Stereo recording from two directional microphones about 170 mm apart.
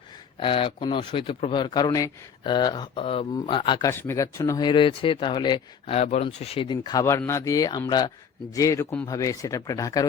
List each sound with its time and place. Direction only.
0.3 s speech: 30° left (ahead or behind)